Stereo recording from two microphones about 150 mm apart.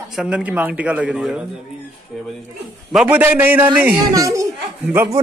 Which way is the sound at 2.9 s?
5° right (ahead or behind).